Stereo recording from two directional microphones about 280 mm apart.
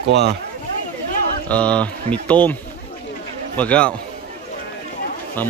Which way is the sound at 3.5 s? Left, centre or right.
Centre.